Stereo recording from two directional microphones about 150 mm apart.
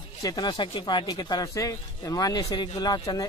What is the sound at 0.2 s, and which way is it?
Speech, 25° left (ahead or behind).